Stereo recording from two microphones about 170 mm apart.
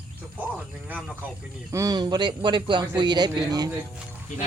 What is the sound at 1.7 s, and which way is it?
A man's voice, 20° right (ahead or behind).